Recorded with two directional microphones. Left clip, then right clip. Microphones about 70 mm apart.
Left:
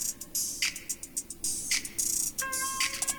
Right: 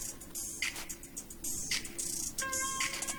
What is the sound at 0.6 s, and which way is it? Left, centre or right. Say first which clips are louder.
Music: left 2 dB; centre.